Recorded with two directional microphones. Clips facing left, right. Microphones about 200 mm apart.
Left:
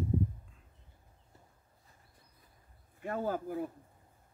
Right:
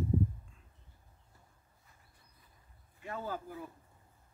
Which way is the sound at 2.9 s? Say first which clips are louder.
Left 6 dB; 50° left (ahead or behind).